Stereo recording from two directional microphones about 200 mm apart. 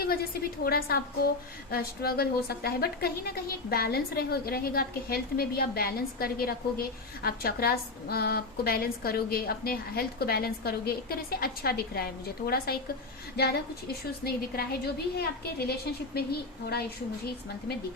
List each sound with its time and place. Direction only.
0.6 s a woman's voice: 50° left (ahead or behind)